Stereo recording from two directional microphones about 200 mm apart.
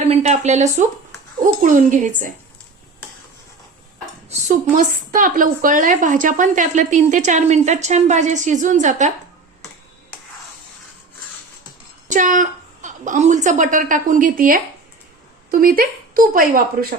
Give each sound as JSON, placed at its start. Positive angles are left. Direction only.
{"t": 0.0, "sound": "a woman's voice", "side_deg": -35}
{"t": 4.3, "sound": "a woman's voice", "side_deg": -40}
{"t": 12.0, "sound": "a woman's voice", "side_deg": -40}